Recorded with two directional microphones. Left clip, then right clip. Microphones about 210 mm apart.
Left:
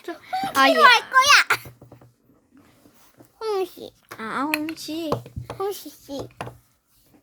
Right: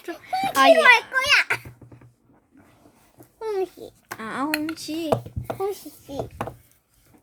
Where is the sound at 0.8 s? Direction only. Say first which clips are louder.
Left 1 dB; 55° left (ahead or behind).